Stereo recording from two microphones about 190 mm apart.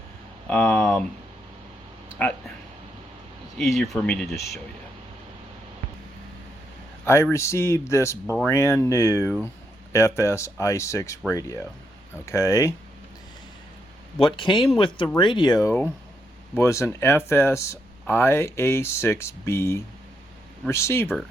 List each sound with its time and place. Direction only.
0.4 s speech: 10° left (ahead or behind)
3.6 s speech: centre (ahead or behind)
7.0 s speech: 15° left (ahead or behind)
14.2 s speech: 25° left (ahead or behind)